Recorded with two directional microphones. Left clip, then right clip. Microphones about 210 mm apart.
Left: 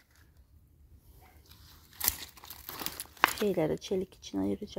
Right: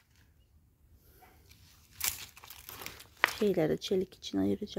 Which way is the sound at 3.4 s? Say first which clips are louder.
Right 1 dB; 25° right (ahead or behind).